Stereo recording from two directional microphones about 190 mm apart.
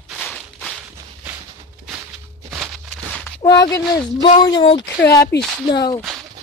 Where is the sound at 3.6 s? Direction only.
20° left (ahead or behind).